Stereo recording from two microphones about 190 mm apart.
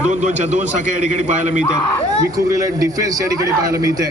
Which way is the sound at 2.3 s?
20° right (ahead or behind).